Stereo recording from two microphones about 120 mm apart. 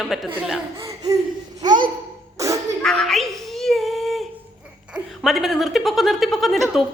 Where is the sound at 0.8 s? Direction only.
30° right (ahead or behind).